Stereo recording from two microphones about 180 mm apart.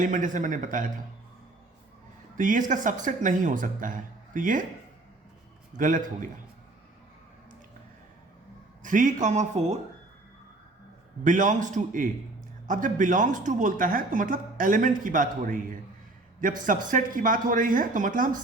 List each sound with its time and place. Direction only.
0.0 s speech: 45° right (ahead or behind)
2.4 s speech: 45° right (ahead or behind)
5.7 s speech: 45° right (ahead or behind)
8.8 s speech: 45° right (ahead or behind)
11.2 s speech: 45° right (ahead or behind)
16.6 s speech: 45° right (ahead or behind)